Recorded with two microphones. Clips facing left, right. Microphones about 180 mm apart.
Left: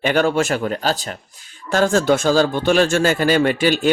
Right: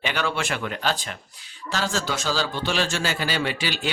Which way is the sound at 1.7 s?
50° left (ahead or behind).